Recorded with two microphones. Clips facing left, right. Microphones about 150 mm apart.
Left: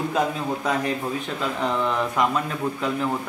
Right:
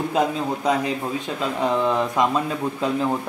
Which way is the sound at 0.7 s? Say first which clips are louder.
Right 3 dB; 15° right (ahead or behind).